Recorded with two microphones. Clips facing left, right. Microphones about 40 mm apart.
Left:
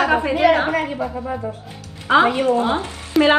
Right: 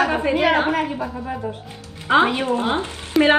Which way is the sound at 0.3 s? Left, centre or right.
Right.